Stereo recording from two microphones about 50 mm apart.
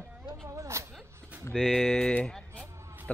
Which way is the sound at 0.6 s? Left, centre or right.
Right.